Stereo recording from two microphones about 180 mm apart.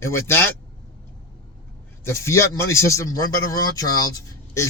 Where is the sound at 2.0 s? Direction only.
15° left (ahead or behind).